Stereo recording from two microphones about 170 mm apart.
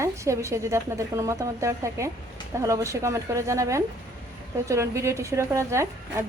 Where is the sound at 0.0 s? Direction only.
15° right (ahead or behind).